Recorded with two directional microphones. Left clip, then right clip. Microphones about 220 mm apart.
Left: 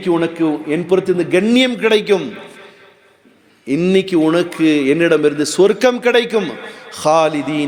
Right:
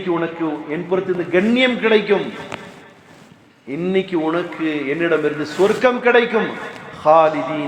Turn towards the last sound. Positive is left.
turn(degrees=65)  # may be behind; listen again after turning